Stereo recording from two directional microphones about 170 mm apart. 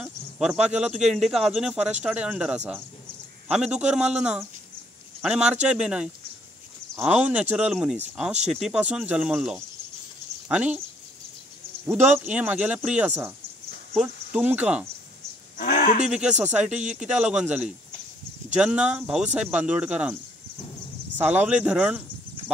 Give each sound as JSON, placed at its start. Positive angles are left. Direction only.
{"t": 0.0, "sound": "speech", "side_deg": -5}
{"t": 11.9, "sound": "speech", "side_deg": -10}
{"t": 13.9, "sound": "cricket", "side_deg": -5}
{"t": 15.5, "sound": "a sound", "side_deg": 55}
{"t": 16.1, "sound": "speech", "side_deg": -5}
{"t": 21.2, "sound": "speech", "side_deg": -10}